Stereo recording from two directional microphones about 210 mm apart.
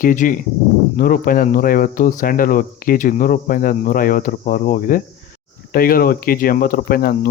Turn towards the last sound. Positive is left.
turn(degrees=45)  # may be behind; listen again after turning